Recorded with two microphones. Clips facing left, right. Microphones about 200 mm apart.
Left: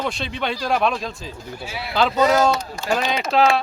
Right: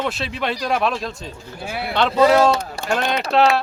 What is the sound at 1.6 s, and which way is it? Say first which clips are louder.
Speech: right 6 dB; 55° right (ahead or behind).